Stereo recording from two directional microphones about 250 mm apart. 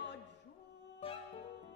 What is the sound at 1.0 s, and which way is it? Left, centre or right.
Music, left.